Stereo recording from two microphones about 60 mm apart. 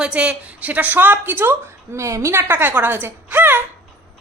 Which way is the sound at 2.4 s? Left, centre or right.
Right.